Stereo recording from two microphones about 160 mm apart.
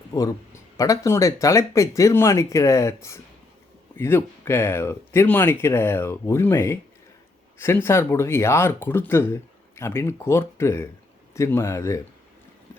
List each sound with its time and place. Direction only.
0.1 s a man's voice: 20° left (ahead or behind)